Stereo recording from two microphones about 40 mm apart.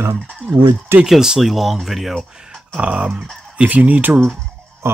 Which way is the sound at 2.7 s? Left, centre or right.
Right.